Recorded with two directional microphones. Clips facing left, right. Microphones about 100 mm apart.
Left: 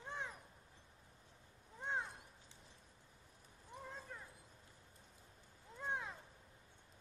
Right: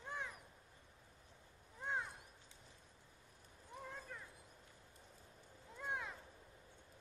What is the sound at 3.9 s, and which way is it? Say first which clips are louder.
Cat: even; 20° left (ahead or behind).